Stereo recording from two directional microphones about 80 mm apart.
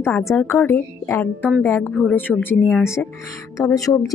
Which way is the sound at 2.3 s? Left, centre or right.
Centre.